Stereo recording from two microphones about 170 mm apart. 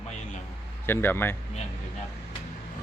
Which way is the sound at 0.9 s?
10° left (ahead or behind).